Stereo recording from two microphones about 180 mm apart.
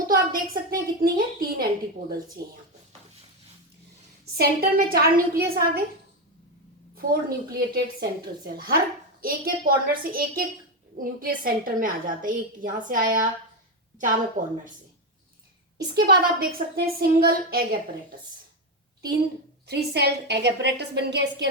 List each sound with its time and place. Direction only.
0.3 s a sound: 50° right (ahead or behind)
4.4 s a woman's voice: 55° right (ahead or behind)
6.9 s a woman's voice: 55° right (ahead or behind)
16.0 s a woman's voice: 60° right (ahead or behind)
19.6 s a woman's voice: 65° right (ahead or behind)